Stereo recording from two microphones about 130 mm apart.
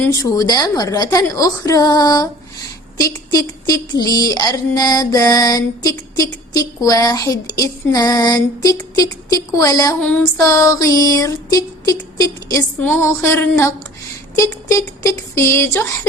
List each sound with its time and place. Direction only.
0.1 s music: 25° left (ahead or behind)
3.7 s music: 30° left (ahead or behind)
12.8 s music: 15° left (ahead or behind)